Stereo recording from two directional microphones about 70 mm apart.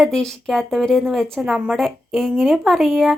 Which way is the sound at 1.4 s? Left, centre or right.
Centre.